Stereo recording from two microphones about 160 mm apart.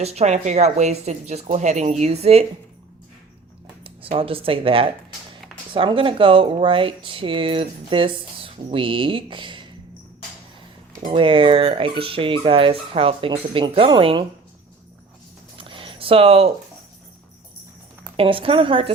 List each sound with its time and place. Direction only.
0.0 s speech: 40° right (ahead or behind)
3.8 s speech: 35° right (ahead or behind)
11.1 s speech: 35° right (ahead or behind)
15.5 s a sound: 35° right (ahead or behind)
18.2 s speech: 35° right (ahead or behind)